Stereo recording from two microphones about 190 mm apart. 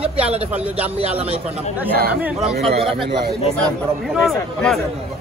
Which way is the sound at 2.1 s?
5° right (ahead or behind).